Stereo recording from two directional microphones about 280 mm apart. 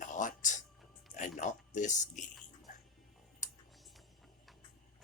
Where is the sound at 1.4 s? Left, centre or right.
Left.